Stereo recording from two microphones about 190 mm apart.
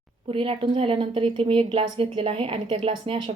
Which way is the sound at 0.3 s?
30° right (ahead or behind).